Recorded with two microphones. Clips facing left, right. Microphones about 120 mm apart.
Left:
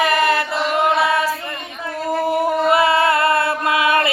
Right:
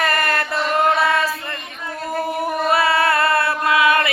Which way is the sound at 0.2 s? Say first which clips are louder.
Left 3 dB; 10° left (ahead or behind).